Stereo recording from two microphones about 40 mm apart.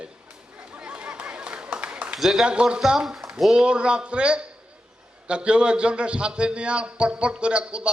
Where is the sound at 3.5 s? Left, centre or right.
Right.